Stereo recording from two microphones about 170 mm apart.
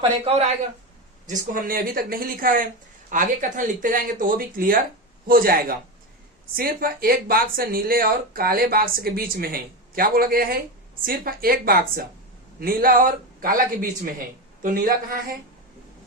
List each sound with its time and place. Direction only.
0.0 s speech: 35° right (ahead or behind)
1.3 s speech: 55° right (ahead or behind)